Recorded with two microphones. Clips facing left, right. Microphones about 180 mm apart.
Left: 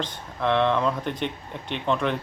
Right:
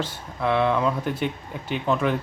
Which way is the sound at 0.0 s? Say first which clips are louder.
Right 1 dB; 5° right (ahead or behind).